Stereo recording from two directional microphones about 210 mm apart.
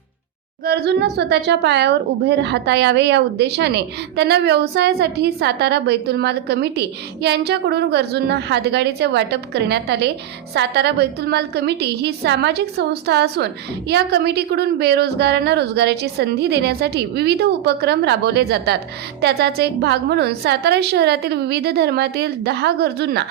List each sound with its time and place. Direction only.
0.6 s a woman's voice: 50° right (ahead or behind)